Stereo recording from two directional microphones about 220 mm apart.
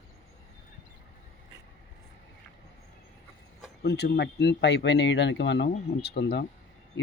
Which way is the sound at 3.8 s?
50° left (ahead or behind).